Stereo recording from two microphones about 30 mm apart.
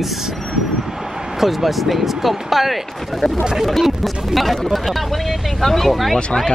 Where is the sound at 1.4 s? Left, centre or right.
Centre.